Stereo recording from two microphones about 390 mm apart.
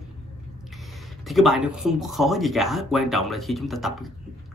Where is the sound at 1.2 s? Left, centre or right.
Centre.